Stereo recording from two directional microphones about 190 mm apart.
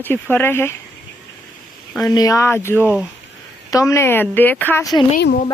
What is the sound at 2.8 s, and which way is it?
Speech, 10° right (ahead or behind).